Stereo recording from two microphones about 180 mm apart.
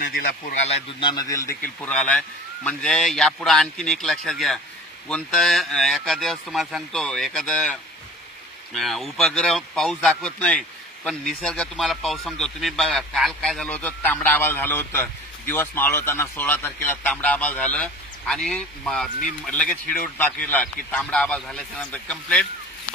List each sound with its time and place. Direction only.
0.0 s a man's voice: 50° left (ahead or behind); by 1.5 s 20° left (ahead or behind)
1.9 s speech: 5° left (ahead or behind)